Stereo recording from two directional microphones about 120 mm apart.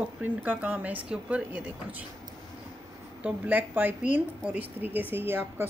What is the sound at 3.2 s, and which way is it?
A woman's voice, 15° right (ahead or behind).